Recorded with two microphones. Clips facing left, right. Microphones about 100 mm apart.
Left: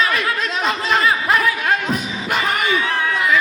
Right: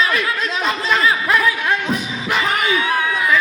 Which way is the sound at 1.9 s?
50° left (ahead or behind).